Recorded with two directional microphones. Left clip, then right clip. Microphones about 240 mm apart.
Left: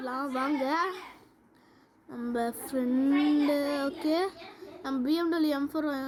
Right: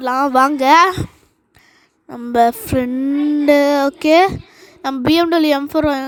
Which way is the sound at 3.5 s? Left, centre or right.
Right.